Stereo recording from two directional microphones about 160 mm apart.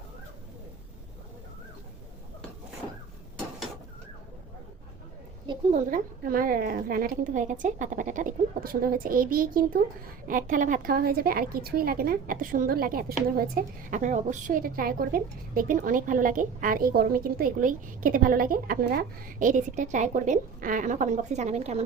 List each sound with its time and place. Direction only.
5.7 s a woman's voice: 60° right (ahead or behind)